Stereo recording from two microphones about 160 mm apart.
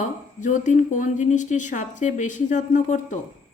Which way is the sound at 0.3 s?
50° left (ahead or behind).